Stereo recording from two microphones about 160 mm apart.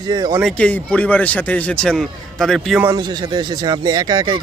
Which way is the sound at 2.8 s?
25° right (ahead or behind).